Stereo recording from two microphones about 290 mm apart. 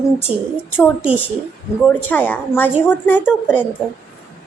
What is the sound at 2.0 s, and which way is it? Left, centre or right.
A woman's voice, centre.